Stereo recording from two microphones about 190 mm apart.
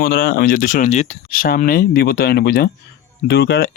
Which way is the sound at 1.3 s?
50° left (ahead or behind).